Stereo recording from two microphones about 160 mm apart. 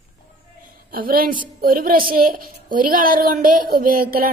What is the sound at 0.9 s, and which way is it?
A woman's voice, 65° right (ahead or behind).